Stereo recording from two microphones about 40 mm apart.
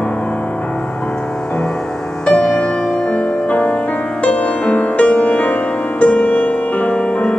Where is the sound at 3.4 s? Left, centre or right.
Left.